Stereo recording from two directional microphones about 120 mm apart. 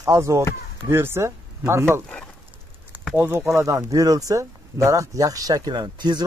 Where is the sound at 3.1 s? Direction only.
15° right (ahead or behind).